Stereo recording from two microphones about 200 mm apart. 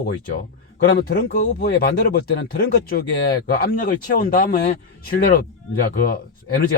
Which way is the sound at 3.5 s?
45° left (ahead or behind).